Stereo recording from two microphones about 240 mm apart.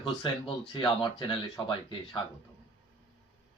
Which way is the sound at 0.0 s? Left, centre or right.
Left.